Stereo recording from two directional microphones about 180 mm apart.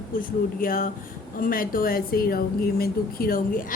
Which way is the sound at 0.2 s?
50° left (ahead or behind).